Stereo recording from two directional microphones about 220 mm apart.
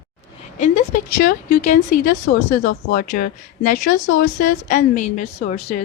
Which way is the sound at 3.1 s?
35° left (ahead or behind).